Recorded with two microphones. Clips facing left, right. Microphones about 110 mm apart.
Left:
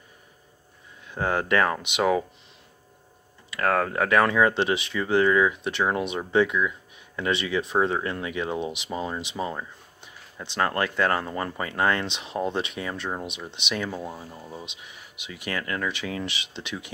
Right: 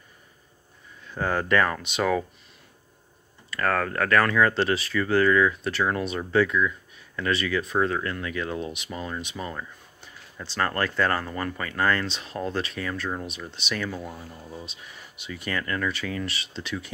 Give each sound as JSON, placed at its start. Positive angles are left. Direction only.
{"t": 1.0, "sound": "speech", "side_deg": 15}
{"t": 3.4, "sound": "speech", "side_deg": 10}